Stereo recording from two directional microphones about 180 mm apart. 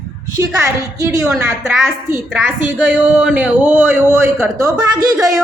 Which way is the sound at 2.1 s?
10° right (ahead or behind).